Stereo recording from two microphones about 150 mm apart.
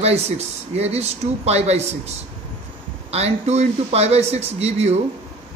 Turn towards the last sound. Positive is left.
turn(degrees=-45)  # may be behind; listen again after turning